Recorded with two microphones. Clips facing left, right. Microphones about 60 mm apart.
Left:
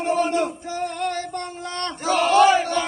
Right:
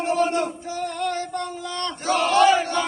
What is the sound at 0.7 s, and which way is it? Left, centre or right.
Music, left.